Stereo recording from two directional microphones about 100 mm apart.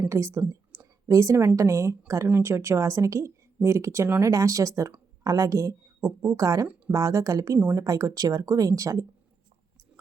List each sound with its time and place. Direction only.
0.1 s a woman's voice: 25° right (ahead or behind)